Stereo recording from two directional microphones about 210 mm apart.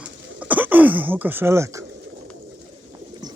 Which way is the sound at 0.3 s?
5° right (ahead or behind).